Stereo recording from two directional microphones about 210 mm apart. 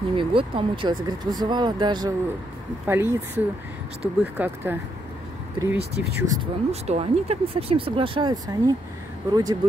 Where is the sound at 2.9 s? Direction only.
10° right (ahead or behind).